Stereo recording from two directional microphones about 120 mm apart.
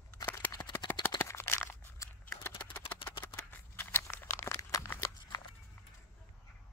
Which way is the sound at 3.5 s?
15° left (ahead or behind).